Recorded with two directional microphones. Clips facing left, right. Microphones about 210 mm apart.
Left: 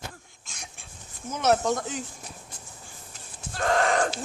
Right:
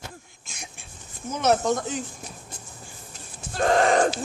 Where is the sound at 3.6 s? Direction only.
25° right (ahead or behind).